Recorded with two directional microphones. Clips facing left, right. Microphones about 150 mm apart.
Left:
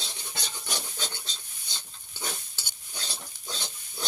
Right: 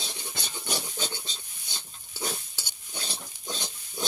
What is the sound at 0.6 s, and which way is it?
Filing, 15° right (ahead or behind).